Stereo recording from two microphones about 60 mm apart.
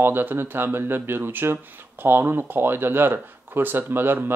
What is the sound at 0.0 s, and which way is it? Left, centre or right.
Speech, right.